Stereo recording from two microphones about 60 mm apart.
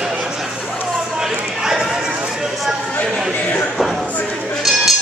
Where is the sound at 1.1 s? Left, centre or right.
Centre.